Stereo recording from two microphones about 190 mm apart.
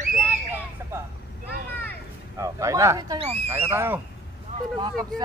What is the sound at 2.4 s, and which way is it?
Speech, 15° right (ahead or behind).